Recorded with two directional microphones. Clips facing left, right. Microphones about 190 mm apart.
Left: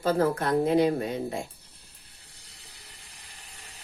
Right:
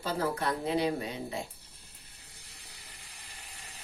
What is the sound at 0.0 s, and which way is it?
Speech, 50° left (ahead or behind).